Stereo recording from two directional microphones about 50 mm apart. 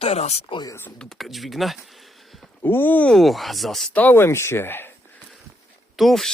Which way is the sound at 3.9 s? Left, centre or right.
Left.